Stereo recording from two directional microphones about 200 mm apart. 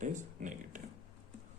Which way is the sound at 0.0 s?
40° right (ahead or behind).